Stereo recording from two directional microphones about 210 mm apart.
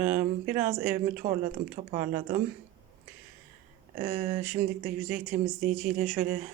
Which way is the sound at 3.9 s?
35° right (ahead or behind).